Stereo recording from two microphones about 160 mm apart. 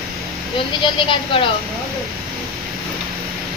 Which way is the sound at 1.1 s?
35° left (ahead or behind).